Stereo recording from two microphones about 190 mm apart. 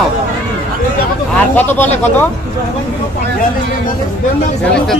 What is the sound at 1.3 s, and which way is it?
Speech, 10° left (ahead or behind).